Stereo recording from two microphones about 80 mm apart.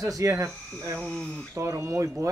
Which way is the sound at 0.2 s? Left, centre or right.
Right.